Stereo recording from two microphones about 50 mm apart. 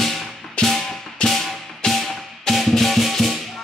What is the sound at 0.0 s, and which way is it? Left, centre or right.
Music, centre.